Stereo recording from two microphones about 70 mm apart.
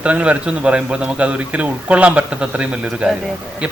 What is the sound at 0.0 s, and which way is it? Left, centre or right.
A man's voice, centre.